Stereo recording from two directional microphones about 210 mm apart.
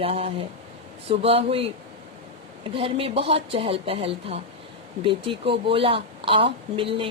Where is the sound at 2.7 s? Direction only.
25° right (ahead or behind).